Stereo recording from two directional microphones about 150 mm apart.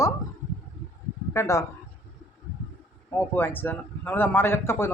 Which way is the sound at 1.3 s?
20° left (ahead or behind).